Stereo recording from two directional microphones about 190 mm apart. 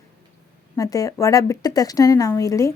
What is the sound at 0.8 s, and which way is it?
A woman's voice, 20° left (ahead or behind).